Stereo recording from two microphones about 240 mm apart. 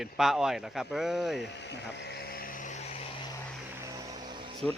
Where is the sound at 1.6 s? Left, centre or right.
Left.